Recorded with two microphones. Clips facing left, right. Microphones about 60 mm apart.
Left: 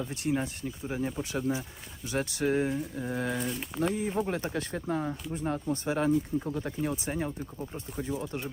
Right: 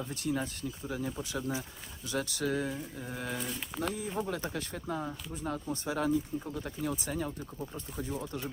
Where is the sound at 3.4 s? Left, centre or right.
Centre.